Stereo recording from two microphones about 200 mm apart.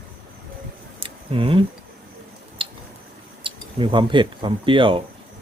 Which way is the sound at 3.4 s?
25° right (ahead or behind).